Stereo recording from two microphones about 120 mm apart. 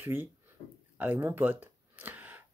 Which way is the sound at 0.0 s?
20° right (ahead or behind).